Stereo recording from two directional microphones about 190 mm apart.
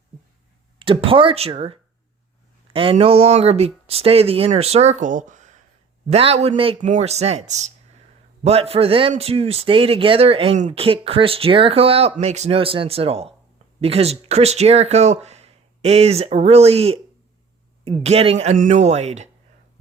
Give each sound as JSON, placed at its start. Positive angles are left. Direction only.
{"t": 0.8, "sound": "a man's voice", "side_deg": -25}